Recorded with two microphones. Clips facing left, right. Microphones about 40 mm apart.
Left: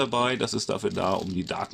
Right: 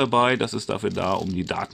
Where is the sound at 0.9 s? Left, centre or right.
Centre.